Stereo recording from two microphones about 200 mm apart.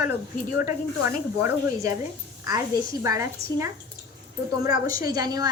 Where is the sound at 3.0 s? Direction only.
15° right (ahead or behind).